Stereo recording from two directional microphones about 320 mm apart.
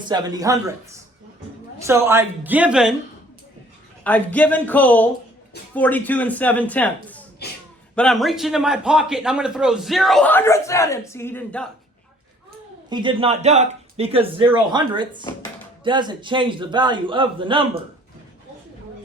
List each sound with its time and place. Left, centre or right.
0.1 s speech: centre
1.9 s a man's voice: centre
4.0 s a man's voice: centre
12.9 s speech: centre